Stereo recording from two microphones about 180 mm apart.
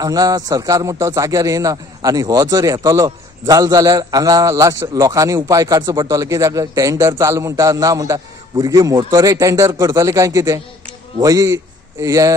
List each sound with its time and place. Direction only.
0.0 s a man's voice: 20° right (ahead or behind)